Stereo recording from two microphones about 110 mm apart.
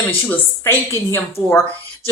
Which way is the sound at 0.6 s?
25° left (ahead or behind).